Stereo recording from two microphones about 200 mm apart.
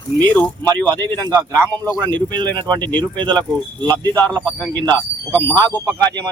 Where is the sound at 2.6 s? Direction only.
20° right (ahead or behind).